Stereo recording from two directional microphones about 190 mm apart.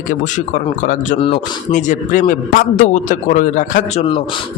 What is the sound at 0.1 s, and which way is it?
A man's voice, 40° left (ahead or behind).